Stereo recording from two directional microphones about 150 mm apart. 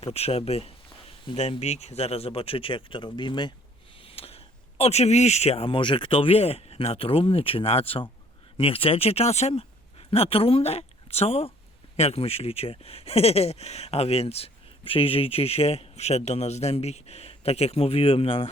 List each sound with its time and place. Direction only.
0.1 s speech: 40° left (ahead or behind)